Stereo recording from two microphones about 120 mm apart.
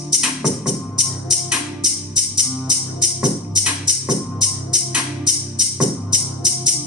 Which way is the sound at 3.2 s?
10° right (ahead or behind).